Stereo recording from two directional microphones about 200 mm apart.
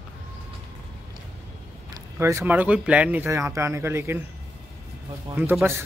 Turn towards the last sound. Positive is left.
turn(degrees=-10)  # may be behind; listen again after turning